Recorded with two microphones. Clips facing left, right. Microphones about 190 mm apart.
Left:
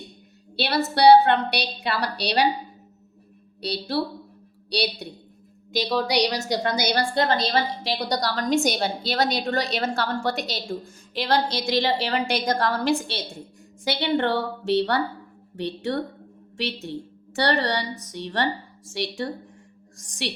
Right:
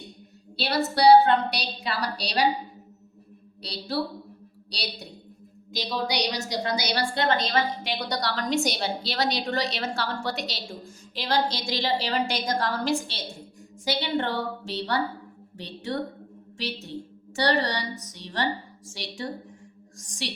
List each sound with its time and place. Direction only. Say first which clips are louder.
0.5 s a woman's voice: left 2 dB; 65° left (ahead or behind)
3.6 s a woman's voice: left 7 dB; 65° left (ahead or behind)
5.7 s a woman's voice: left 5 dB; 65° left (ahead or behind)
17.3 s a woman's voice: left 2 dB; 60° left (ahead or behind)